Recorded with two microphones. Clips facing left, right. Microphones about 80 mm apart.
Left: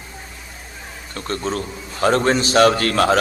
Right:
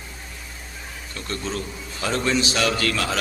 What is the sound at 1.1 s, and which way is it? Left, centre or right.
A man's voice, left.